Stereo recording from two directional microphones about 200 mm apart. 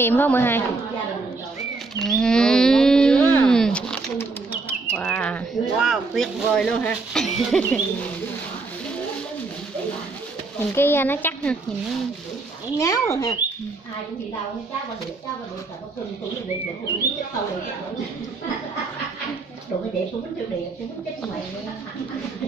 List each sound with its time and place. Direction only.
0.0 s speech: 10° left (ahead or behind)
2.0 s wild animals: 5° left (ahead or behind)
4.9 s speech: 5° left (ahead or behind)
10.7 s speech: 10° left (ahead or behind)
12.7 s speech: 15° left (ahead or behind)